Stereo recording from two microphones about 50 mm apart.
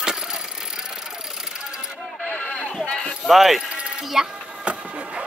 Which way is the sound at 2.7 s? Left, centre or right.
Centre.